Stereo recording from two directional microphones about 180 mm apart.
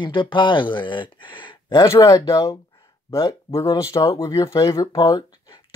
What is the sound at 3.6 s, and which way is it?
Speech, 15° left (ahead or behind).